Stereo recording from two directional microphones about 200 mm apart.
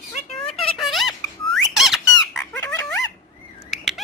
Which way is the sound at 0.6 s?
Centre (ahead or behind).